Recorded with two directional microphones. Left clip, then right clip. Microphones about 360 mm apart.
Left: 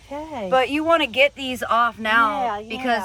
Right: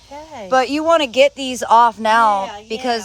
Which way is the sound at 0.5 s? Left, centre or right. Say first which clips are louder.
Right 4 dB; centre.